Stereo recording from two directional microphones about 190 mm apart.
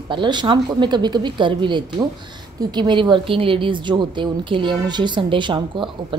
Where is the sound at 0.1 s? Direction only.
25° right (ahead or behind).